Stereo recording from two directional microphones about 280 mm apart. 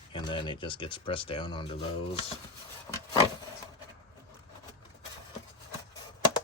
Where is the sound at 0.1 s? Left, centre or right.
Centre.